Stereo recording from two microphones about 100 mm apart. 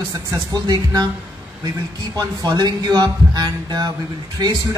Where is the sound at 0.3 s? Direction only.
40° right (ahead or behind).